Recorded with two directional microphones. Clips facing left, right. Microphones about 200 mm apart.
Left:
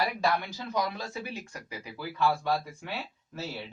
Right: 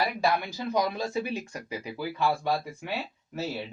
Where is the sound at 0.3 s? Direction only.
10° right (ahead or behind).